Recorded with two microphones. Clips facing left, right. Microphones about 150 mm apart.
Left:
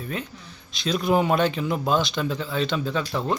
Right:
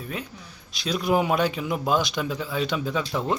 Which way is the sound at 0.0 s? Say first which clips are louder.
Left 2 dB; 5° right (ahead or behind).